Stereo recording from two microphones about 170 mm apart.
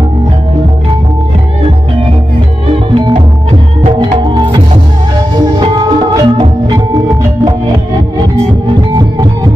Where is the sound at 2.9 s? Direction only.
30° right (ahead or behind).